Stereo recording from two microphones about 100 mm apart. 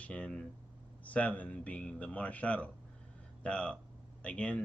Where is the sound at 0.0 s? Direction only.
10° left (ahead or behind).